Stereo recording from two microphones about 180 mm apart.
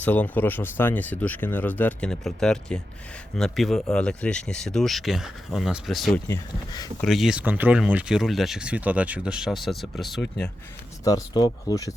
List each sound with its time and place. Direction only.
0.0 s speech: 10° left (ahead or behind)
6.2 s speech: 15° left (ahead or behind)
7.0 s speech: centre (ahead or behind)
11.0 s speech: 20° left (ahead or behind)